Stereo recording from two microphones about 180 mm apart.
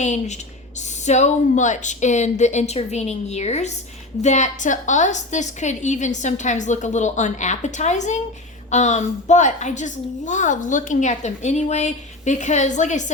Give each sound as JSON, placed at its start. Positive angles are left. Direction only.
{"t": 0.0, "sound": "a woman's voice", "side_deg": 40}